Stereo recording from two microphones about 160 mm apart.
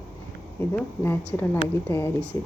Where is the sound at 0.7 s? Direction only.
15° left (ahead or behind).